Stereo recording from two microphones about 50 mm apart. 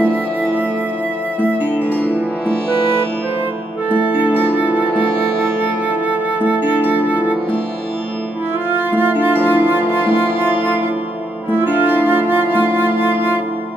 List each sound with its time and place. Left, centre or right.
1.6 s music: left
3.9 s music: right
6.0 s music: right
8.6 s music: right
11.5 s flute: right